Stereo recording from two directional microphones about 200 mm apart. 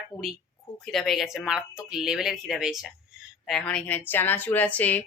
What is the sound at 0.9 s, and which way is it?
Speech, centre (ahead or behind).